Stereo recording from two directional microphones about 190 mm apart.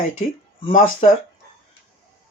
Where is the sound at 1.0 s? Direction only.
35° left (ahead or behind).